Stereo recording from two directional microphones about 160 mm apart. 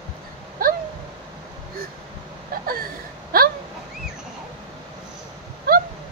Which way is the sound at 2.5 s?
65° right (ahead or behind).